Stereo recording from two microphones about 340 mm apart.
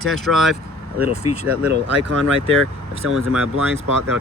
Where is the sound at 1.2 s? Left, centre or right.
Left.